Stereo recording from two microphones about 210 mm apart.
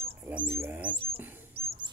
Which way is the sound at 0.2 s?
10° right (ahead or behind).